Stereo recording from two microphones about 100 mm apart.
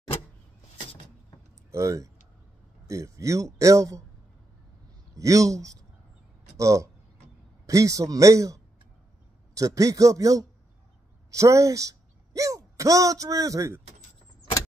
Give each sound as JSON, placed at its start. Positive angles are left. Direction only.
{"t": 1.7, "sound": "speech", "side_deg": -30}
{"t": 5.1, "sound": "speech", "side_deg": -35}